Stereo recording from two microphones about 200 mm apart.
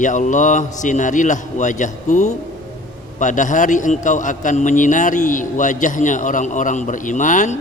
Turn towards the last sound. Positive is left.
turn(degrees=40)  # may be behind; listen again after turning